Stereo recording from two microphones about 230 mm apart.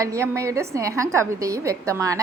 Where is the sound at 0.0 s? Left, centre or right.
Centre.